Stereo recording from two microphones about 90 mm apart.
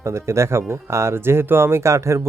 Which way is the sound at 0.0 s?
30° right (ahead or behind).